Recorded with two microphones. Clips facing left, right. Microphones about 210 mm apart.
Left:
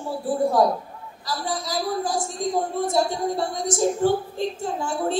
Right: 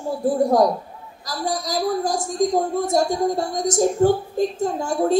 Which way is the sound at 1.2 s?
40° right (ahead or behind).